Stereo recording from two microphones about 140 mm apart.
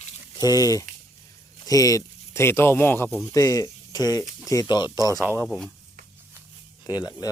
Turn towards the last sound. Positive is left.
turn(degrees=30)  # may be behind; listen again after turning